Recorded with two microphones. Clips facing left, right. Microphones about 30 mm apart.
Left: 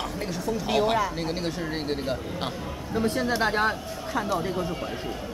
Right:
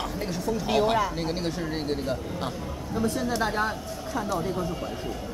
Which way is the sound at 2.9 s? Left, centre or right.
Left.